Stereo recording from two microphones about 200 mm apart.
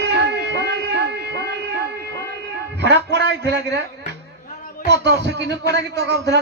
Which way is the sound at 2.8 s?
55° right (ahead or behind).